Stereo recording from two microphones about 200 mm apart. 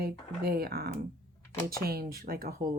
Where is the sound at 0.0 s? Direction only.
50° right (ahead or behind).